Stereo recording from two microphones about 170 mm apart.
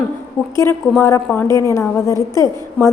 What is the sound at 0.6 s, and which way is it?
A woman's voice, 15° left (ahead or behind).